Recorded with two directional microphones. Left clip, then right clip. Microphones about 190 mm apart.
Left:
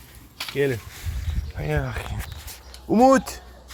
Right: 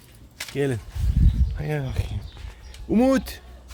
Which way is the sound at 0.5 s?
25° right (ahead or behind).